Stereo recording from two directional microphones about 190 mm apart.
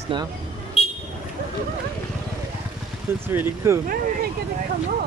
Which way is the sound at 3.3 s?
10° right (ahead or behind).